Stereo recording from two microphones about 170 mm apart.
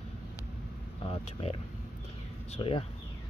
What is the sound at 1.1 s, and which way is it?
Speech, 35° left (ahead or behind).